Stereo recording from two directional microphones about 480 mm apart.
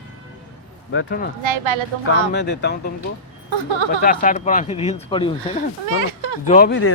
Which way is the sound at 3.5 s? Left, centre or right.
Right.